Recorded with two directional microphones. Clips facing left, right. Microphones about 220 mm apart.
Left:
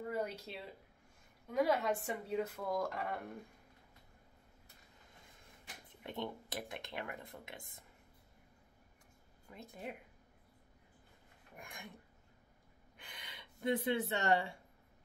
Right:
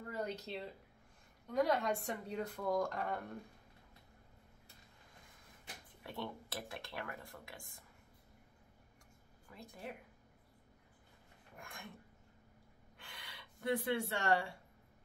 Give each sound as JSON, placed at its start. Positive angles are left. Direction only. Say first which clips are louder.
{"t": 0.1, "sound": "speech", "louder": "right 2 dB", "side_deg": 10}
{"t": 6.0, "sound": "speech", "louder": "left 2 dB", "side_deg": 20}
{"t": 9.5, "sound": "speech", "louder": "left 2 dB", "side_deg": 20}
{"t": 11.5, "sound": "speech", "louder": "left 1 dB", "side_deg": 15}
{"t": 12.9, "sound": "a sound", "louder": "left 1 dB", "side_deg": 15}